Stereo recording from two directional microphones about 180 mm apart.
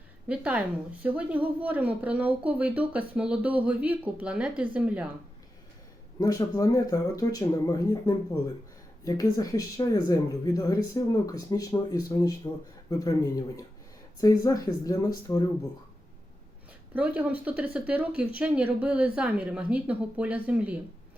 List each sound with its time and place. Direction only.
0.3 s speech: 5° right (ahead or behind)
6.1 s speech: 20° left (ahead or behind)
16.9 s speech: 10° right (ahead or behind)